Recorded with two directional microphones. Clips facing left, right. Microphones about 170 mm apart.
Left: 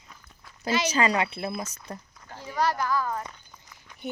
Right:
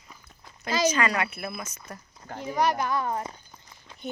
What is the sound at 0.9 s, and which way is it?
Speech, 30° left (ahead or behind).